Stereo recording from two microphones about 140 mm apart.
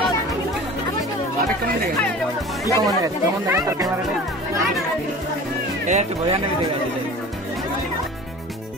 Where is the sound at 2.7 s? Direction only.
25° right (ahead or behind).